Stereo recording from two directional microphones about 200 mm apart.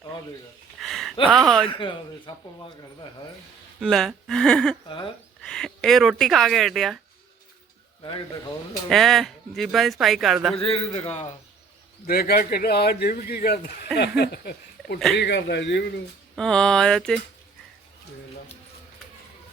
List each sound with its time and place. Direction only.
0.8 s a sound: centre (ahead or behind)
1.3 s speech: centre (ahead or behind)
1.7 s a man's voice: 25° left (ahead or behind)
3.8 s speech: centre (ahead or behind)
8.9 s speech: centre (ahead or behind)
10.5 s a man's voice: 30° left (ahead or behind)
12.0 s speech: 50° left (ahead or behind)
16.3 s speech: 5° left (ahead or behind)